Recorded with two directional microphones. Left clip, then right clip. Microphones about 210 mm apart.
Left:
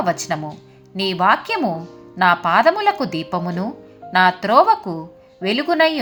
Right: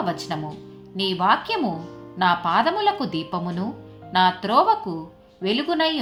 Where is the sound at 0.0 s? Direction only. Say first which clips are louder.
Left 6 dB; 30° left (ahead or behind).